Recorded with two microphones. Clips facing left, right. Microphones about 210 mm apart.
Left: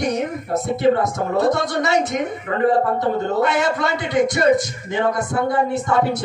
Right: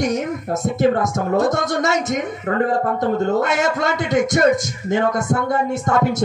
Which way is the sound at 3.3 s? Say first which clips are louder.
Even; 45° right (ahead or behind).